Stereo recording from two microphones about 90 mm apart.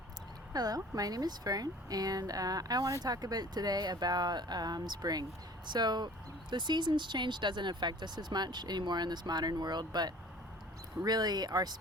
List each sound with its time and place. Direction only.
0.5 s speech: 45° right (ahead or behind)